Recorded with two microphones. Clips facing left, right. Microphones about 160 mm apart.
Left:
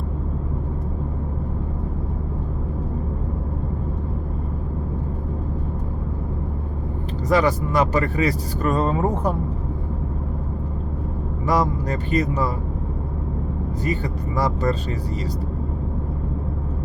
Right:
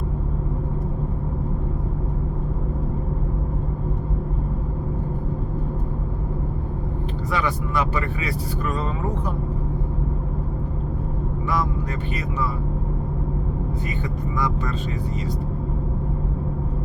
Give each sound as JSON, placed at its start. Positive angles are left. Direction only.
{"t": 7.3, "sound": "speech", "side_deg": 40}
{"t": 11.4, "sound": "speech", "side_deg": 40}
{"t": 13.8, "sound": "speech", "side_deg": 35}